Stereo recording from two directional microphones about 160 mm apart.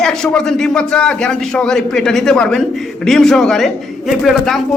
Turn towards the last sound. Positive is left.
turn(degrees=0)  # may be behind; listen again after turning